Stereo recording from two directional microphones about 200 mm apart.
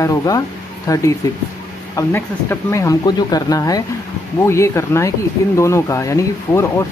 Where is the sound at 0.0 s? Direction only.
15° left (ahead or behind).